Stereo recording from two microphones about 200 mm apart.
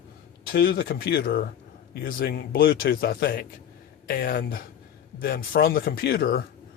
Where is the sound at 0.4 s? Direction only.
50° left (ahead or behind).